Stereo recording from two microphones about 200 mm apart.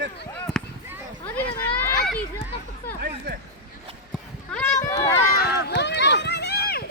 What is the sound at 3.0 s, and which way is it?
Chatter, 50° right (ahead or behind).